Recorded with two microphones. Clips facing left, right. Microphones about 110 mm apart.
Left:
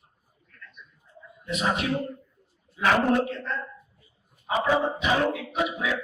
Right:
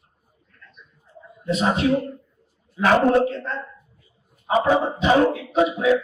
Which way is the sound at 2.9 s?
35° right (ahead or behind).